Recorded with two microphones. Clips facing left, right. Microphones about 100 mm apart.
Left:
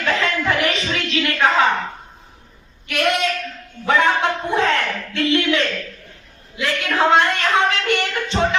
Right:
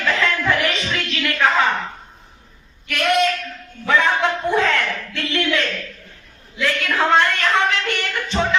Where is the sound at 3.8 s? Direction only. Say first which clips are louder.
Left 1 dB; 20° left (ahead or behind).